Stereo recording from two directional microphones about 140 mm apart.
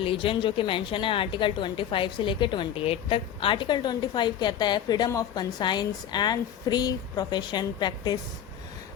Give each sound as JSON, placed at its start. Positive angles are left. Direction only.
{"t": 0.0, "sound": "a woman's voice", "side_deg": 40}